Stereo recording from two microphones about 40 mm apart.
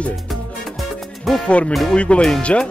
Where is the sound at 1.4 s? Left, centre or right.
Left.